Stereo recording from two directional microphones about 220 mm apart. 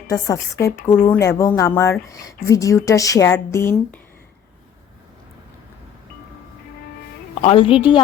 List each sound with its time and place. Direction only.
0.1 s speech: 15° left (ahead or behind)
7.4 s a woman's voice: 25° left (ahead or behind)